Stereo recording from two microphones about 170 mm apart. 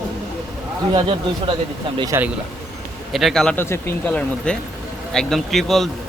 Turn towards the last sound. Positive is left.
turn(degrees=0)  # may be behind; listen again after turning